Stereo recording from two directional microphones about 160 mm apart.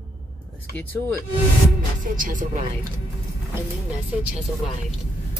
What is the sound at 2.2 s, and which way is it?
Speech, 55° right (ahead or behind).